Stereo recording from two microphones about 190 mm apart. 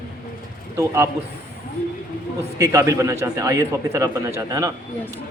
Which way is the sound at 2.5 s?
15° right (ahead or behind).